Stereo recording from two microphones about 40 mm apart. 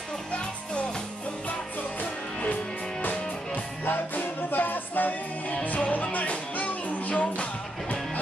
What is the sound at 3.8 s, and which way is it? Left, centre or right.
Music, left.